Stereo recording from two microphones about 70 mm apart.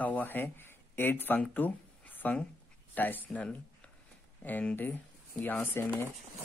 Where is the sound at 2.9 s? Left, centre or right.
Left.